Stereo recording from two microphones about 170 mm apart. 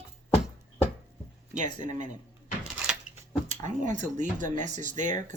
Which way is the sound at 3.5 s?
45° right (ahead or behind).